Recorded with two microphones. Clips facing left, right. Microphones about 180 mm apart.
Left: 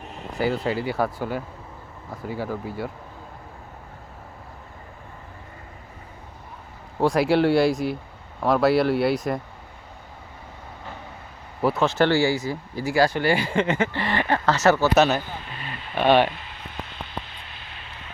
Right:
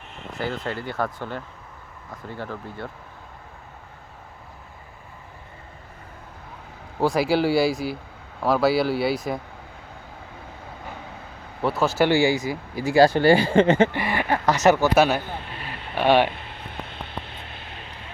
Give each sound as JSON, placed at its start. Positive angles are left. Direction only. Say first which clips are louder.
{"t": 0.3, "sound": "speech", "louder": "left 5 dB", "side_deg": 10}
{"t": 7.0, "sound": "speech", "louder": "left 2 dB", "side_deg": 0}
{"t": 11.6, "sound": "speech", "louder": "left 1 dB", "side_deg": -5}
{"t": 13.9, "sound": "speech", "louder": "even", "side_deg": -10}
{"t": 15.6, "sound": "a sound", "louder": "left 1 dB", "side_deg": -10}